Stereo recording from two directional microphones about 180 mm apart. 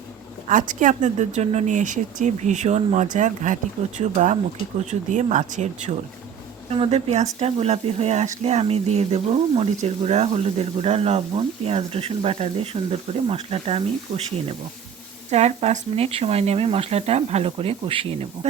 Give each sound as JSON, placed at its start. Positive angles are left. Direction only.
{"t": 0.4, "sound": "speech", "side_deg": -45}
{"t": 15.3, "sound": "speech", "side_deg": -35}